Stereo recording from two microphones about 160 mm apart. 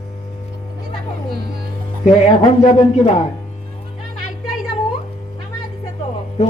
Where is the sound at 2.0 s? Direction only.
45° left (ahead or behind).